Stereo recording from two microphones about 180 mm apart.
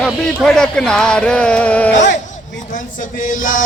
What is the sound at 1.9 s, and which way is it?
Speech, 40° left (ahead or behind).